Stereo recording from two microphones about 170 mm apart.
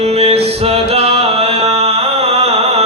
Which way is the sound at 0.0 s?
35° right (ahead or behind).